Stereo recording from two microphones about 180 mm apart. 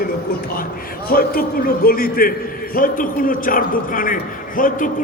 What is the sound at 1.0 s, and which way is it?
A man's voice, 55° left (ahead or behind).